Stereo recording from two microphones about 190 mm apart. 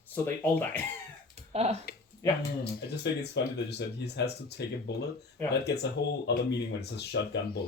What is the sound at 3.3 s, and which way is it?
Speech, 60° left (ahead or behind).